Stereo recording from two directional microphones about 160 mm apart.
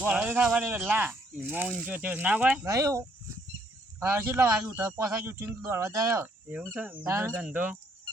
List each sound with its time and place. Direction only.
0.0 s speech: 10° right (ahead or behind)
2.6 s speech: 20° right (ahead or behind)
4.1 s speech: 20° right (ahead or behind)